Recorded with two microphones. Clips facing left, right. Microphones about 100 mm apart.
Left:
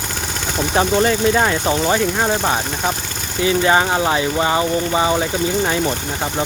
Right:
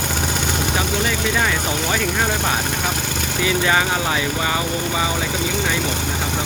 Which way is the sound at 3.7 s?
25° left (ahead or behind).